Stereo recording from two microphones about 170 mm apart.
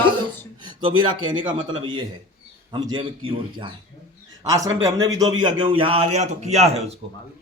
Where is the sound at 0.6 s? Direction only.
30° right (ahead or behind).